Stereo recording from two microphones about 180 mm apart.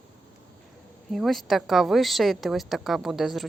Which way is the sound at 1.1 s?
Centre (ahead or behind).